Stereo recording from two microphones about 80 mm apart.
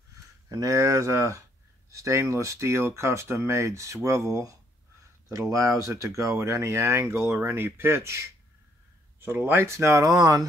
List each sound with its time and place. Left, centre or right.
0.5 s speech: right